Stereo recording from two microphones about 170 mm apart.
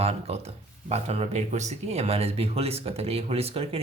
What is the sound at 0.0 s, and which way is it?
Speech, 35° right (ahead or behind).